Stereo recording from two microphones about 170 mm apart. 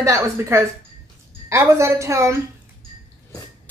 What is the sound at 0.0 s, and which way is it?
Speech, 15° right (ahead or behind).